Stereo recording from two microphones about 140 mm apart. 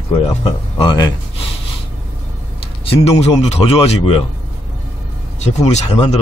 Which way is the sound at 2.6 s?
45° left (ahead or behind).